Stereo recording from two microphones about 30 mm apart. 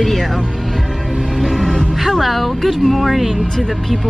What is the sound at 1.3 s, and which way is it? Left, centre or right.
Music, centre.